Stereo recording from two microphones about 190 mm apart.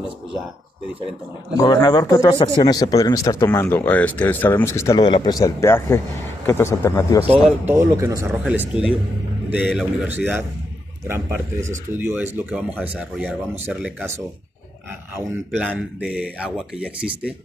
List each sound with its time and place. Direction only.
1.6 s speech: 20° left (ahead or behind)
7.4 s speech: 10° right (ahead or behind)
8.5 s a man's voice: 5° right (ahead or behind)
15.6 s a man's voice: 5° right (ahead or behind)